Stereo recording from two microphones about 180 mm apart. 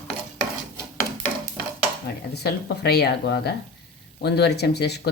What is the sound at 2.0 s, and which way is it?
Speech, 65° left (ahead or behind).